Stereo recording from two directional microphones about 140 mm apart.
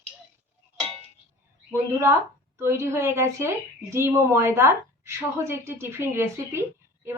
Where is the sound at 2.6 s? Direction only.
20° right (ahead or behind).